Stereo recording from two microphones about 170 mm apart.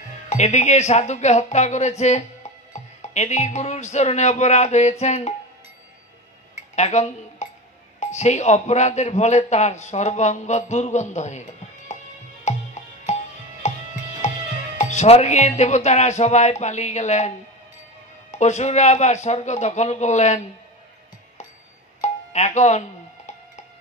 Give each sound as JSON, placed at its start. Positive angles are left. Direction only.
{"t": 0.3, "sound": "speech", "side_deg": 45}
{"t": 6.5, "sound": "dishes", "side_deg": 45}
{"t": 8.0, "sound": "speech", "side_deg": 40}
{"t": 12.5, "sound": "music", "side_deg": 40}
{"t": 13.6, "sound": "music", "side_deg": 40}
{"t": 14.8, "sound": "speech", "side_deg": 45}
{"t": 18.4, "sound": "speech", "side_deg": 40}
{"t": 22.0, "sound": "music", "side_deg": 45}